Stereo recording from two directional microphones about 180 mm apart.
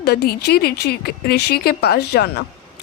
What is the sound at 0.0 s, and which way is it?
Speech, 60° left (ahead or behind).